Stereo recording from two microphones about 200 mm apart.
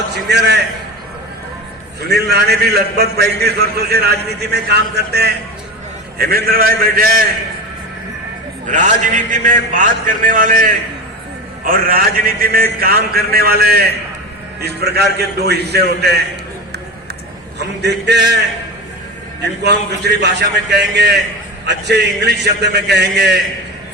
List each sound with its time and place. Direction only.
0.1 s a man's voice: 55° right (ahead or behind)
2.0 s a man's voice: 55° right (ahead or behind)
8.6 s a man's voice: 40° right (ahead or behind)
17.6 s a man's voice: 55° right (ahead or behind)
19.4 s a man's voice: 60° right (ahead or behind)